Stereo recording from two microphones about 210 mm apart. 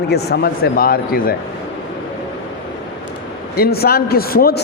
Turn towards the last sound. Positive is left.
turn(degrees=45)  # may be behind; listen again after turning